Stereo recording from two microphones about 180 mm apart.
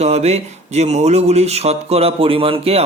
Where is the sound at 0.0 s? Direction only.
35° right (ahead or behind).